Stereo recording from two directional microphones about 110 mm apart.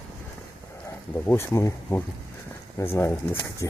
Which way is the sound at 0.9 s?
25° left (ahead or behind).